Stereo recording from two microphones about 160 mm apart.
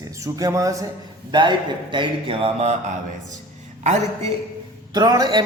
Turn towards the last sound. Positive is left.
turn(degrees=-25)  # may be behind; listen again after turning